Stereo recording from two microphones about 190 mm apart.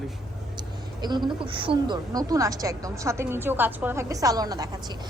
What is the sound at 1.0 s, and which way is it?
A woman's voice, 25° right (ahead or behind).